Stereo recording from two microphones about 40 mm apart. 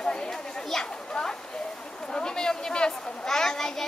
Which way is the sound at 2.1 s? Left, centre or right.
Centre.